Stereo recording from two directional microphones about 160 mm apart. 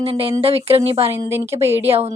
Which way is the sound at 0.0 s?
35° right (ahead or behind).